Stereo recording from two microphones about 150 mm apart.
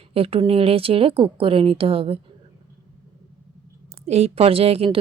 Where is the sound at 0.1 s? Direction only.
40° right (ahead or behind).